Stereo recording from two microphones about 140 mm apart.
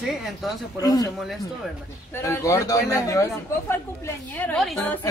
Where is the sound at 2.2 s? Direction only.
20° left (ahead or behind).